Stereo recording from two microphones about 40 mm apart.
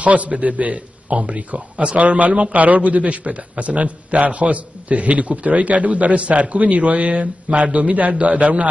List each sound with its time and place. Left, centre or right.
0.0 s a man's voice: right